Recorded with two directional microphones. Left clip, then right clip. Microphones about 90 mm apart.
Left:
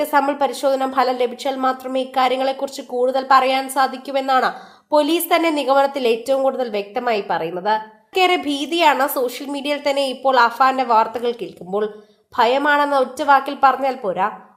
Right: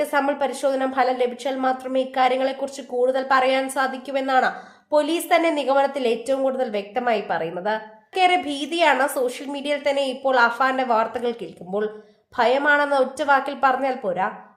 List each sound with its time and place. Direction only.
0.0 s a woman's voice: 35° left (ahead or behind)